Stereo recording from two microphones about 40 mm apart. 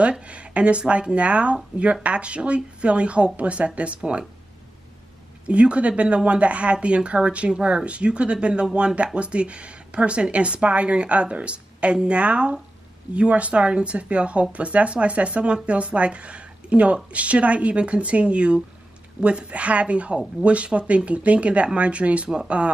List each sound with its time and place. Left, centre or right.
0.3 s speech: right
5.5 s speech: right